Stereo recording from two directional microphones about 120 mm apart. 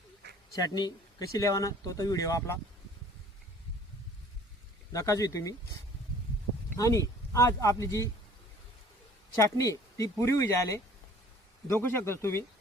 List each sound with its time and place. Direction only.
0.7 s speech: 35° left (ahead or behind)
4.9 s speech: 30° left (ahead or behind)
9.4 s speech: 25° left (ahead or behind)